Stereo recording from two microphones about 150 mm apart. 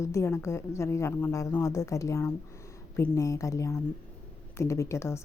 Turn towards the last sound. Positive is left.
turn(degrees=20)  # may be behind; listen again after turning